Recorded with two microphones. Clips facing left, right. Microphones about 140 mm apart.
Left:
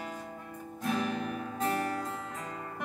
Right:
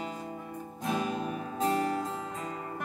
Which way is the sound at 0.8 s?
20° right (ahead or behind).